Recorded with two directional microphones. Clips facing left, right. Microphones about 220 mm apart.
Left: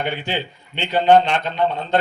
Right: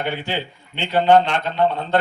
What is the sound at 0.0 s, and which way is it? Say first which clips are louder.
A man's voice: even; 15° left (ahead or behind).